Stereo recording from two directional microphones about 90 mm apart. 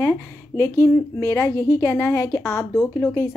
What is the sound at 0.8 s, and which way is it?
A woman's voice, 30° left (ahead or behind).